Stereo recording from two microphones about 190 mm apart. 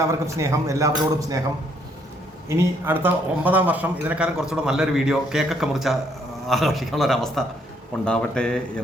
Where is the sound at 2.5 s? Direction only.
10° right (ahead or behind).